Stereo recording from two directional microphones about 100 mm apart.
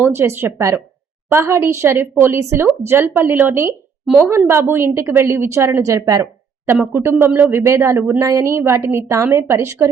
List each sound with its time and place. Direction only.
0.0 s a woman's voice: 25° right (ahead or behind)